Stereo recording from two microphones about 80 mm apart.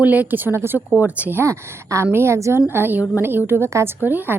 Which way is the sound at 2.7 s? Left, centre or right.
Right.